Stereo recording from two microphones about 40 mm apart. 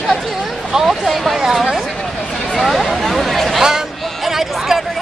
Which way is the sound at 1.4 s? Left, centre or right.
Centre.